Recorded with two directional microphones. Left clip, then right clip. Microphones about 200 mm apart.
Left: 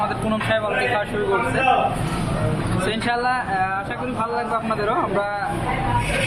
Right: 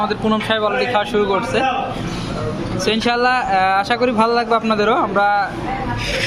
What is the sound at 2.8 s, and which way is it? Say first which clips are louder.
Speech: right 6 dB; 35° right (ahead or behind).